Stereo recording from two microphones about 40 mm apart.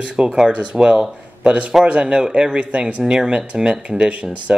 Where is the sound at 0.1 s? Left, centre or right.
Right.